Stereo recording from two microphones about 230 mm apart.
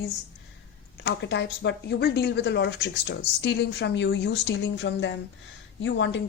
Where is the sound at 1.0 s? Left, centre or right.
Left.